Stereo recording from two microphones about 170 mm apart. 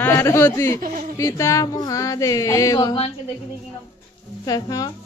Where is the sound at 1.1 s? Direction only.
20° left (ahead or behind).